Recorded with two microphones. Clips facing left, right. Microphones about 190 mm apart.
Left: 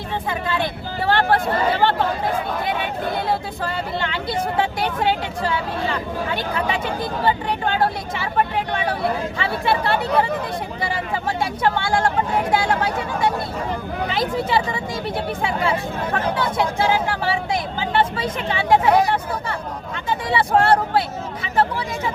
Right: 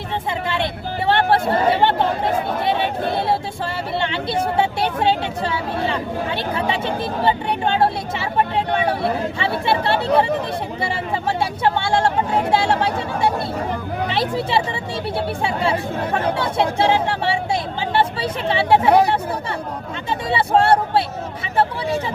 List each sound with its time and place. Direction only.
0.4 s speech: 25° right (ahead or behind)
20.1 s speech: 25° right (ahead or behind)